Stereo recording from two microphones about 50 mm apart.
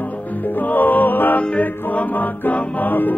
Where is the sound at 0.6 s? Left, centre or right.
Left.